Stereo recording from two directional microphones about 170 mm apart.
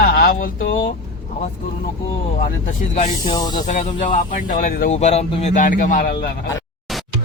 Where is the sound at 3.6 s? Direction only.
45° left (ahead or behind).